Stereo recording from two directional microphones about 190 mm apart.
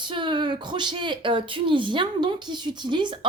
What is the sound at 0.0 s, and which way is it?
Speech, 25° right (ahead or behind).